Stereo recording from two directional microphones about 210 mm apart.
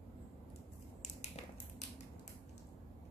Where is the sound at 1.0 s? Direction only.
30° left (ahead or behind).